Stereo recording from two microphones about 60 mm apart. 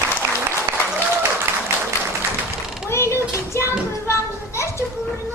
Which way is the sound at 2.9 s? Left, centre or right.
Left.